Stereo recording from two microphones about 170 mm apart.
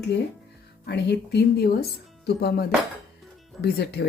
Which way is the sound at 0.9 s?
75° left (ahead or behind).